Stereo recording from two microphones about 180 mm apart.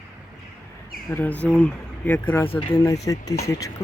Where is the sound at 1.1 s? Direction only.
10° left (ahead or behind).